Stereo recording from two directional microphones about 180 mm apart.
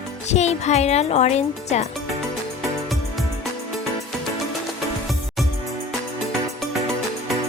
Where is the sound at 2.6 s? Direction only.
Centre (ahead or behind).